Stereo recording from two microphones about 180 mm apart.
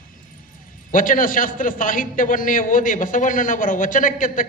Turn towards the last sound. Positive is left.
turn(degrees=50)  # may be behind; listen again after turning